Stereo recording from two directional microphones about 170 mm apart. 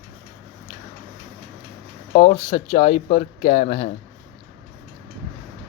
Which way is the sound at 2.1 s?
40° left (ahead or behind).